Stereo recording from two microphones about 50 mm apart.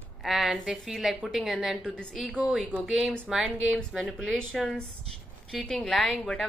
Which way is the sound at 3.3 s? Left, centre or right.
Centre.